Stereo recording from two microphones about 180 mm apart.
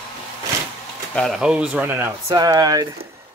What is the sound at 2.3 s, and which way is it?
Speech, 20° right (ahead or behind).